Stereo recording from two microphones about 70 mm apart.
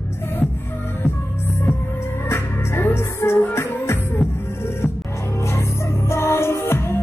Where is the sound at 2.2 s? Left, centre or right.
Left.